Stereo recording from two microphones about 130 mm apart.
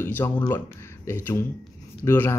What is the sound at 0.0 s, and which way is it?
A man's voice, 15° left (ahead or behind).